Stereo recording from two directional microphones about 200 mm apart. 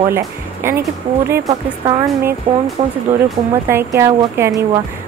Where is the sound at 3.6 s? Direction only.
10° right (ahead or behind).